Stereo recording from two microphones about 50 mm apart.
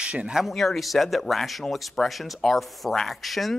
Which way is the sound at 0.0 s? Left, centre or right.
Right.